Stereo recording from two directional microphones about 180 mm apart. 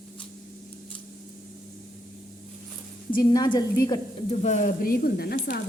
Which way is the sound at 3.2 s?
20° left (ahead or behind).